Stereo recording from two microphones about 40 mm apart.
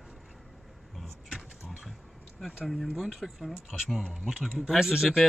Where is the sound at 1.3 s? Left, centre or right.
Centre.